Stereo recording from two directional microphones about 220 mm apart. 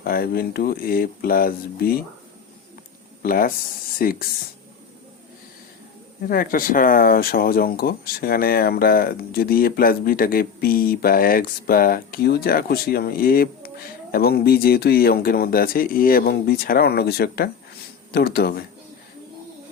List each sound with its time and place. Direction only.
0.0 s speech: 40° left (ahead or behind)
3.2 s speech: 40° left (ahead or behind)
6.2 s speech: 40° left (ahead or behind)